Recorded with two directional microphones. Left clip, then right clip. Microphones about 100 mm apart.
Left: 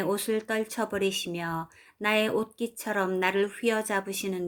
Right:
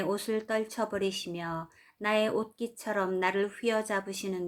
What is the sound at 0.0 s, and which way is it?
Speech, 35° left (ahead or behind).